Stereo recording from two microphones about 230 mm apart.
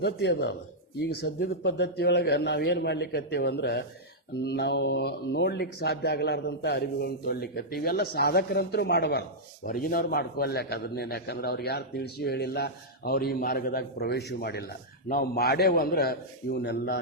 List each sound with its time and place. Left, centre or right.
0.0 s a man's voice: left